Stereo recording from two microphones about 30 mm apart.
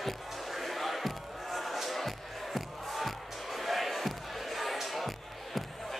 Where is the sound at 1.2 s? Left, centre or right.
Centre.